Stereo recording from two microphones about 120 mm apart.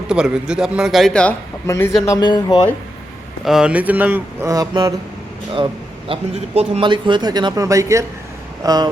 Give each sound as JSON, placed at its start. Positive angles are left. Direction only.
{"t": 0.1, "sound": "a man's voice", "side_deg": -5}
{"t": 1.6, "sound": "speech", "side_deg": 25}
{"t": 2.0, "sound": "speech", "side_deg": 35}
{"t": 3.4, "sound": "speech", "side_deg": -5}
{"t": 4.4, "sound": "speech", "side_deg": -30}
{"t": 6.1, "sound": "speech", "side_deg": -60}